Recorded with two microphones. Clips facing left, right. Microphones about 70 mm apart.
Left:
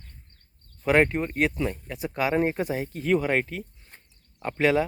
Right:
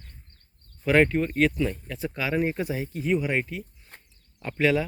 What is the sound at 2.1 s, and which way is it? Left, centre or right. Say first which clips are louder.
Speech: left 3 dB; left.